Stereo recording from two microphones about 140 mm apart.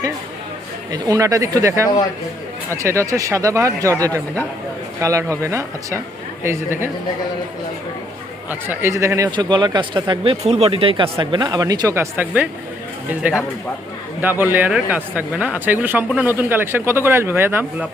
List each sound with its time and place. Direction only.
0.9 s speech: 25° right (ahead or behind)
4.9 s speech: 20° right (ahead or behind)
8.4 s speech: 15° right (ahead or behind); by 10.3 s 35° right (ahead or behind)
10.4 s speech: 50° right (ahead or behind); by 17.7 s 15° right (ahead or behind)